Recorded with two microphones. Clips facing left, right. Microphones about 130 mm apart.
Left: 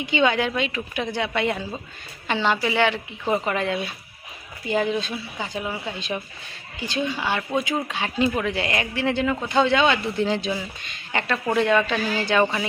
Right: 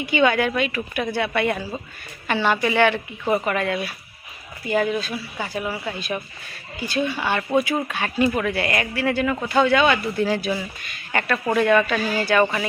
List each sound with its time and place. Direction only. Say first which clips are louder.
0.0 s a woman's voice: right 2 dB; 20° left (ahead or behind)